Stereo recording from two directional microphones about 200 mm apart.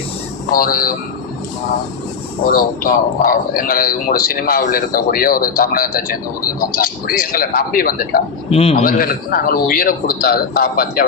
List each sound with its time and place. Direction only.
0.5 s a man's voice: 45° left (ahead or behind)
2.5 s a man's voice: 45° left (ahead or behind)
8.4 s a man's voice: 30° left (ahead or behind)
8.7 s a man's voice: 45° left (ahead or behind)